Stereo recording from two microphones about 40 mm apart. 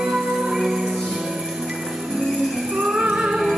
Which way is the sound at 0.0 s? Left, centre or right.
Centre.